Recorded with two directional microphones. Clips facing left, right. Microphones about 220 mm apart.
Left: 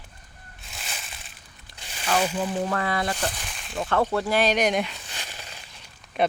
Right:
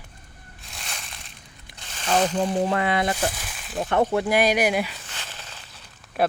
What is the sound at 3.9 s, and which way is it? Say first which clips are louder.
Speech: right 2 dB; 20° right (ahead or behind).